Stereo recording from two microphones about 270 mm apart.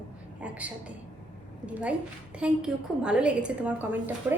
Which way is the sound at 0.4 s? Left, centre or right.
Centre.